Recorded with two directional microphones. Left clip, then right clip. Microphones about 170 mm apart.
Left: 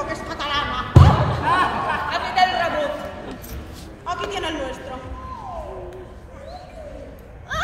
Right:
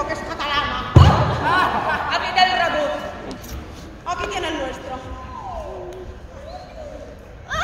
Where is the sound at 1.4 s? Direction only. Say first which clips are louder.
Even; 60° right (ahead or behind).